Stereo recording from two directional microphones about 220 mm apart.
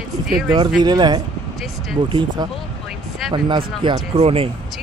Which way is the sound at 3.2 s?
Centre (ahead or behind).